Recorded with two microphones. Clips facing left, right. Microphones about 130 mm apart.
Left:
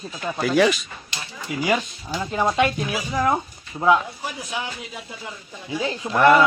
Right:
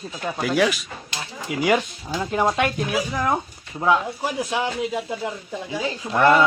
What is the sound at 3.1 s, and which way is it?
Speech, 5° left (ahead or behind).